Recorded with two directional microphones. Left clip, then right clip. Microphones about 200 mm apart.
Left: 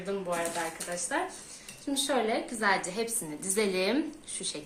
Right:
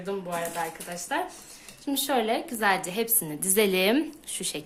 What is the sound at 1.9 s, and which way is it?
A woman's voice, 55° right (ahead or behind).